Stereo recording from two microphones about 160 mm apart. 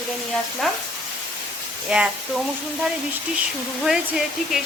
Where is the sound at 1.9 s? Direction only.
5° right (ahead or behind).